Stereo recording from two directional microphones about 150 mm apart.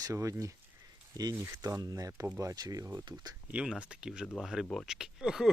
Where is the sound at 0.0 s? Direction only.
20° right (ahead or behind).